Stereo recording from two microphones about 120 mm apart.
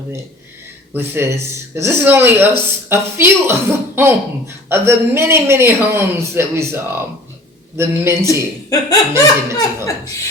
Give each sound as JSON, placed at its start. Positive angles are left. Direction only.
{"t": 0.9, "sound": "speech", "side_deg": -20}
{"t": 8.3, "sound": "speech", "side_deg": 30}